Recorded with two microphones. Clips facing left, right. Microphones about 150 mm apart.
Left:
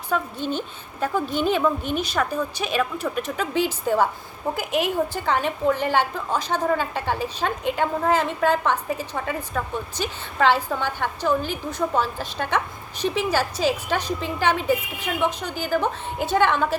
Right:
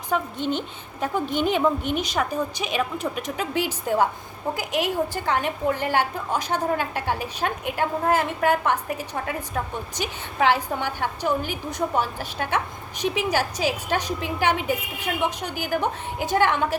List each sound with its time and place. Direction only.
0.1 s a woman's voice: 20° right (ahead or behind)
5.4 s a woman's voice: 15° right (ahead or behind)